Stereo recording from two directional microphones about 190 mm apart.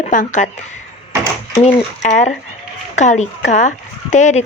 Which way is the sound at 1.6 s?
40° left (ahead or behind).